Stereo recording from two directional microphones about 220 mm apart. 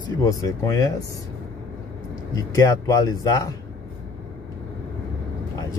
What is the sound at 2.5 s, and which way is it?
Speech, 15° left (ahead or behind).